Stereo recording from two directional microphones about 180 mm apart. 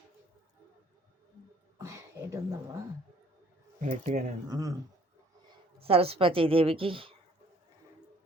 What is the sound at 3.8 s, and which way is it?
Speech, 45° right (ahead or behind).